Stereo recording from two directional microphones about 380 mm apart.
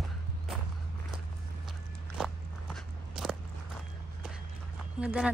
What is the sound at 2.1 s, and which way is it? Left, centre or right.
Walk, centre.